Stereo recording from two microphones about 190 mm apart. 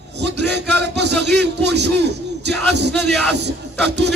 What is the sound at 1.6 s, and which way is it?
Speech, 65° right (ahead or behind).